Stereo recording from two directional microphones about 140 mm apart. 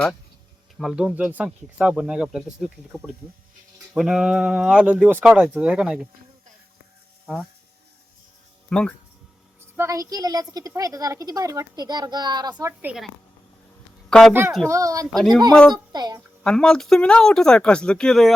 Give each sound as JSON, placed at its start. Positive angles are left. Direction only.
{"t": 0.8, "sound": "speech", "side_deg": -5}
{"t": 8.7, "sound": "speech", "side_deg": 5}
{"t": 9.7, "sound": "speech", "side_deg": -20}
{"t": 12.8, "sound": "speech", "side_deg": -5}
{"t": 14.1, "sound": "speech", "side_deg": 5}
{"t": 14.7, "sound": "speech", "side_deg": -25}
{"t": 15.0, "sound": "speech", "side_deg": 0}
{"t": 15.7, "sound": "speech", "side_deg": -30}
{"t": 16.4, "sound": "speech", "side_deg": 5}